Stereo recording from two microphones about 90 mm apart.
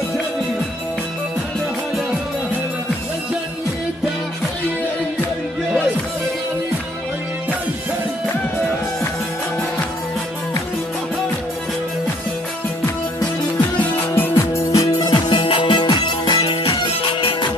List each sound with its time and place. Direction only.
13.7 s music: 20° left (ahead or behind)
14.3 s music: 30° left (ahead or behind)
15.0 s music: 60° left (ahead or behind)